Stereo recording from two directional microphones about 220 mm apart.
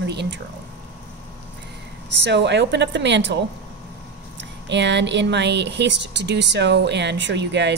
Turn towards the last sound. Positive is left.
turn(degrees=-50)  # may be behind; listen again after turning